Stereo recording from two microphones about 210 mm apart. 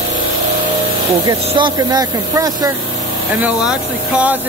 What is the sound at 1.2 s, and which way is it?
Speech, 20° right (ahead or behind).